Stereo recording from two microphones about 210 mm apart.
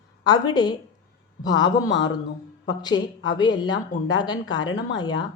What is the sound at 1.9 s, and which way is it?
Speech, 60° left (ahead or behind).